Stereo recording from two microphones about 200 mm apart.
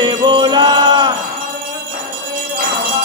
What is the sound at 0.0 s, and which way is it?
Jingle bell, 25° right (ahead or behind).